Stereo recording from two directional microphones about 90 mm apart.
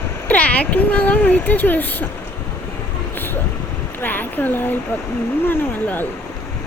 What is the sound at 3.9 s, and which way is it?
Speech, 20° left (ahead or behind).